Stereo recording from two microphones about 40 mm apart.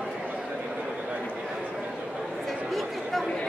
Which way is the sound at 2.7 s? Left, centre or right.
Centre.